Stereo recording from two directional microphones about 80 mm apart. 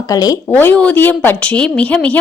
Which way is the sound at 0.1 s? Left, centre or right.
Left.